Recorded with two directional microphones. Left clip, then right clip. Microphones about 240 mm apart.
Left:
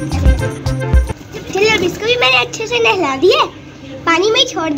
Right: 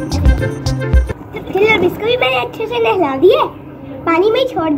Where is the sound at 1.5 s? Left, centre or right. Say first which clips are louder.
Right 1 dB; right.